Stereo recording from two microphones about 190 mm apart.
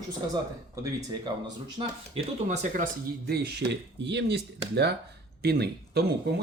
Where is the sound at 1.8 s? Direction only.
30° right (ahead or behind).